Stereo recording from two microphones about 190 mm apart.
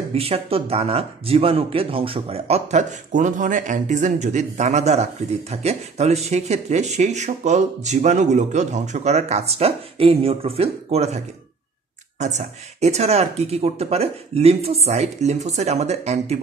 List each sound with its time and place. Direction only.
0.1 s speech: 30° right (ahead or behind)
12.2 s speech: 35° right (ahead or behind)